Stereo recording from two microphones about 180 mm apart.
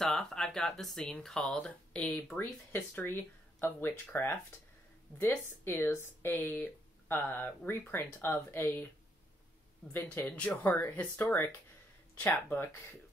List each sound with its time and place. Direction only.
0.0 s speech: 5° left (ahead or behind)
9.9 s speech: 10° left (ahead or behind)